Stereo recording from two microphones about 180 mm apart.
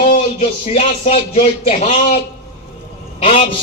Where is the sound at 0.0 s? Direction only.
40° left (ahead or behind).